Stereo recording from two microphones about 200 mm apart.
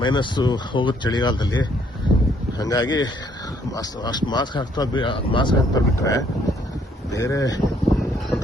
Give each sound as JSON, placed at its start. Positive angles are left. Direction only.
{"t": 0.0, "sound": "speech", "side_deg": 20}